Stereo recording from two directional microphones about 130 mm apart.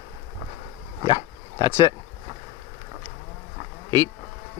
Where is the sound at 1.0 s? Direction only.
25° right (ahead or behind).